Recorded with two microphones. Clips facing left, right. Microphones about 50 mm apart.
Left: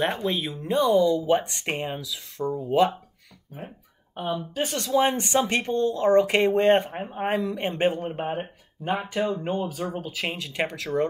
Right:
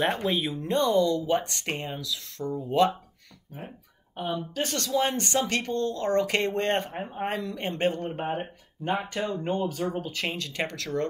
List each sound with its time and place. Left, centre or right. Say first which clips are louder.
0.3 s speech: even; centre
4.2 s speech: left 2 dB; centre